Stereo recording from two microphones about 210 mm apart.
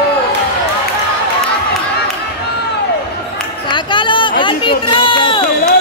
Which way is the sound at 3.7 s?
25° left (ahead or behind).